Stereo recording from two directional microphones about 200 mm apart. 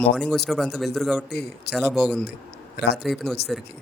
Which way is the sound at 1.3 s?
55° left (ahead or behind).